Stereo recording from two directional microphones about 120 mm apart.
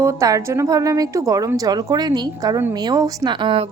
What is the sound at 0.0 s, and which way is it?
A woman's voice, 25° right (ahead or behind).